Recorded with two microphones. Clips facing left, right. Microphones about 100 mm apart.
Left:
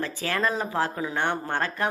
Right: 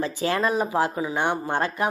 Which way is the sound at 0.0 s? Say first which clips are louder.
Right 3 dB; 20° right (ahead or behind).